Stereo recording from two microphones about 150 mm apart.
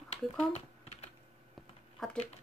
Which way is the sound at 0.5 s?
45° left (ahead or behind).